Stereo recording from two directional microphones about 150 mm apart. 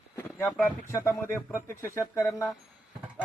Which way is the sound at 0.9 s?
15° left (ahead or behind).